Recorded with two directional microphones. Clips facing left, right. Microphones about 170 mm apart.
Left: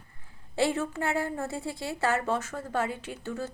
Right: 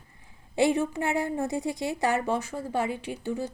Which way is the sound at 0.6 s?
15° right (ahead or behind).